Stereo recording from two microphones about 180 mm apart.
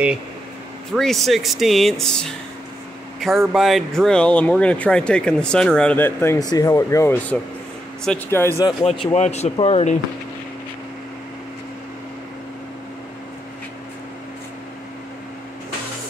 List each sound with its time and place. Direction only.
0.9 s speech: centre (ahead or behind)
3.5 s speech: centre (ahead or behind)
8.6 s speech: 30° left (ahead or behind)